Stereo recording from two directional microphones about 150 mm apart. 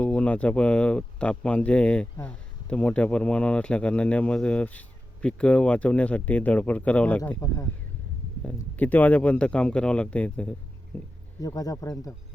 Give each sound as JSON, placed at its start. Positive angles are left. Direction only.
{"t": 0.0, "sound": "speech", "side_deg": 10}
{"t": 7.4, "sound": "speech", "side_deg": 20}
{"t": 8.5, "sound": "speech", "side_deg": 10}
{"t": 11.3, "sound": "speech", "side_deg": 25}